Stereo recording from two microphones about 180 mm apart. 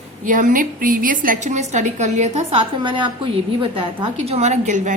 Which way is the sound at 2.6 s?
25° right (ahead or behind).